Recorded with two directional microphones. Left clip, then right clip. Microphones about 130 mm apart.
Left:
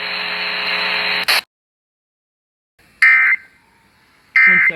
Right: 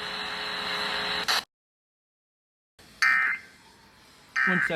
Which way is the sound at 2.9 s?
15° left (ahead or behind).